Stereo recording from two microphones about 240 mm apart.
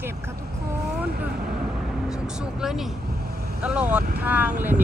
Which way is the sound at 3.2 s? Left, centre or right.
Right.